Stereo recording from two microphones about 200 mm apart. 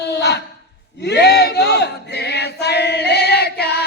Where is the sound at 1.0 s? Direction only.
55° left (ahead or behind).